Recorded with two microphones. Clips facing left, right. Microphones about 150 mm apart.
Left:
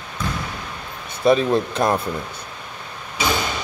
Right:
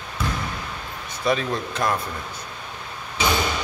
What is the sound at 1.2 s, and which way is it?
Speech, 25° left (ahead or behind).